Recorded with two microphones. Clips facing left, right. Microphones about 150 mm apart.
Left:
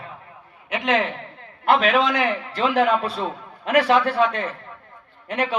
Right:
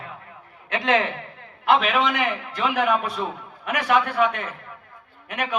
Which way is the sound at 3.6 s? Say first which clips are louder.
Left 6 dB; 30° left (ahead or behind).